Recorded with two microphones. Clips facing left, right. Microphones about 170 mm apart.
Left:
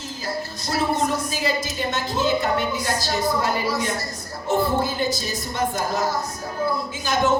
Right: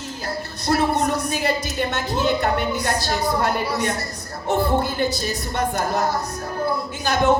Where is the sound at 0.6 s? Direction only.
60° right (ahead or behind).